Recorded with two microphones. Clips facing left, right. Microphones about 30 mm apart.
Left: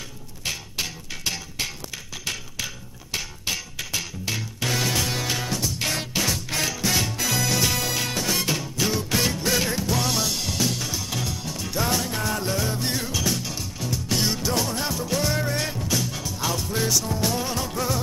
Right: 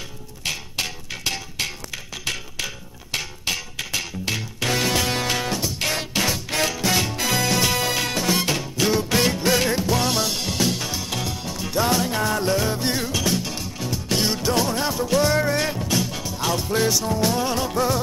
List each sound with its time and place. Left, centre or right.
0.5 s music: centre